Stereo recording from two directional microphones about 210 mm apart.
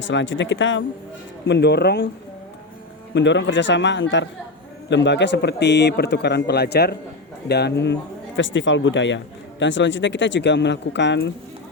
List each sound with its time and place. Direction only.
0.1 s speech: 60° left (ahead or behind)
3.2 s speech: 55° left (ahead or behind)